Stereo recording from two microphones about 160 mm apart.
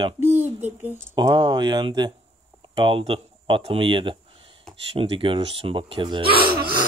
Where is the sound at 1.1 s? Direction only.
25° right (ahead or behind).